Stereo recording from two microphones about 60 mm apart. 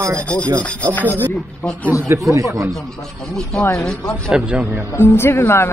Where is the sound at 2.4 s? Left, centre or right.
Right.